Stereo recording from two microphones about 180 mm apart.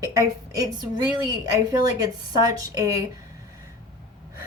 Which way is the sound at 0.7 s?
25° right (ahead or behind).